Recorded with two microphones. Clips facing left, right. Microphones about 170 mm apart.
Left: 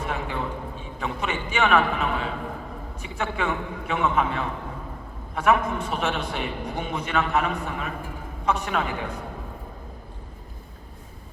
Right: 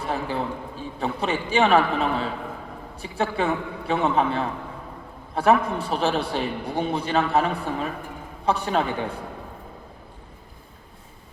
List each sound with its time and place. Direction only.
0.0 s a man's voice: 35° right (ahead or behind)